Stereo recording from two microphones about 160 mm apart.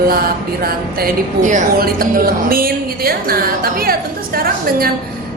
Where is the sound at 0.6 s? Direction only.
60° right (ahead or behind).